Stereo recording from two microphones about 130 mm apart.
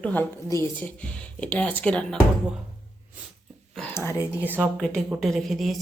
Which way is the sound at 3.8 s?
15° left (ahead or behind).